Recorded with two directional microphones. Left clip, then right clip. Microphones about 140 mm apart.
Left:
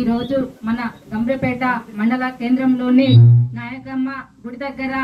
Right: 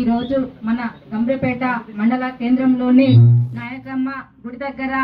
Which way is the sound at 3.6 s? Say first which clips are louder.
Even; 15° left (ahead or behind).